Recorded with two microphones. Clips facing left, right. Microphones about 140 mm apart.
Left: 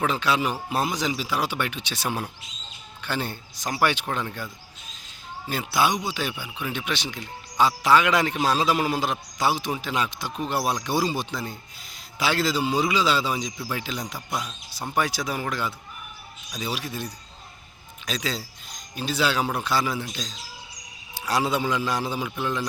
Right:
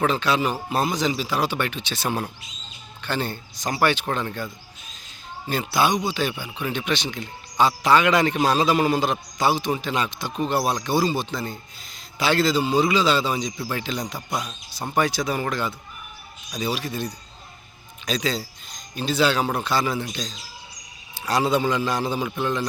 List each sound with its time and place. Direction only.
0.0 s speech: 10° left (ahead or behind)
5.5 s a man's voice: 5° left (ahead or behind)